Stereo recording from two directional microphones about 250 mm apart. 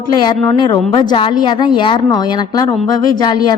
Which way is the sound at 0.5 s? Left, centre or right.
Centre.